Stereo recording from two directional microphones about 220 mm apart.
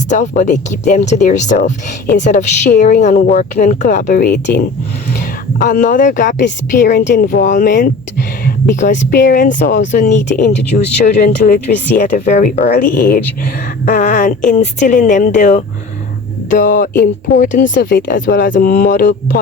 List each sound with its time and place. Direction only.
0.1 s a woman's voice: 35° left (ahead or behind)